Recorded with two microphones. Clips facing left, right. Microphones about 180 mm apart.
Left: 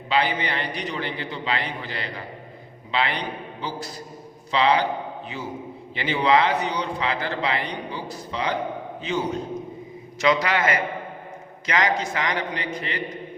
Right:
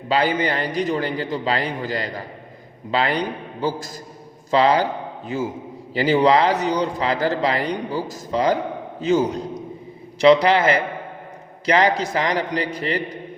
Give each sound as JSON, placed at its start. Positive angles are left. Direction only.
{"t": 0.1, "sound": "a man's voice", "side_deg": -40}